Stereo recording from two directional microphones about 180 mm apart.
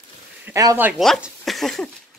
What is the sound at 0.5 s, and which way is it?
Speech, 15° right (ahead or behind).